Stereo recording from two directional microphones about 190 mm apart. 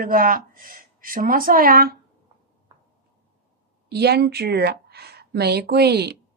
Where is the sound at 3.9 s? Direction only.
55° right (ahead or behind).